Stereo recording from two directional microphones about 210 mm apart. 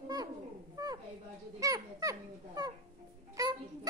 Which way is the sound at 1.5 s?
15° right (ahead or behind).